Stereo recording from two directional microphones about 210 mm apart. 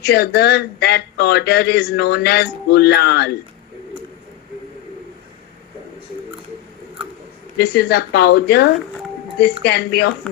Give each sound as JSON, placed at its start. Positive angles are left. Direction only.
{"t": 0.0, "sound": "speech", "side_deg": 50}
{"t": 7.6, "sound": "speech", "side_deg": 50}